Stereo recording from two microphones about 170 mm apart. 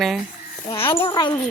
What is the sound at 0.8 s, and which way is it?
Speech, 15° left (ahead or behind).